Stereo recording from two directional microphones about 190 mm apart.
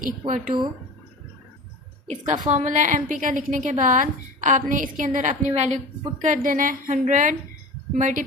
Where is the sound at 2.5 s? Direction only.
40° right (ahead or behind).